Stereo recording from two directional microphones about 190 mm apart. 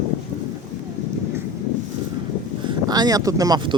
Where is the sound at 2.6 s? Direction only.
20° right (ahead or behind).